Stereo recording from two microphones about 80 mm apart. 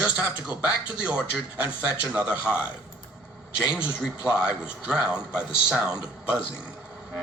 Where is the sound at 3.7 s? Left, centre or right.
Centre.